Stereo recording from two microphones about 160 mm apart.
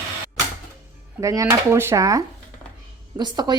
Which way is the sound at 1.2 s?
20° right (ahead or behind).